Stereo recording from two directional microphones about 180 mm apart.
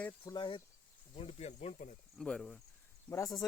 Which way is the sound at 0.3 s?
25° left (ahead or behind).